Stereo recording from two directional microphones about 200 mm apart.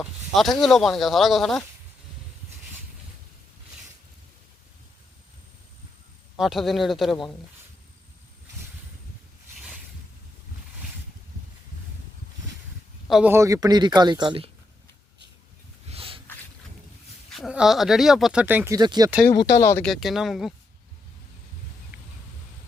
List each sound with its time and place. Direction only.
0.0 s speech: centre (ahead or behind)
6.3 s speech: centre (ahead or behind)
13.1 s speech: centre (ahead or behind)
13.3 s speech: 15° right (ahead or behind)
15.9 s a sound: 25° right (ahead or behind)
17.3 s speech: centre (ahead or behind); by 19.1 s 20° right (ahead or behind)
19.5 s speech: 15° left (ahead or behind)
19.8 s speech: centre (ahead or behind)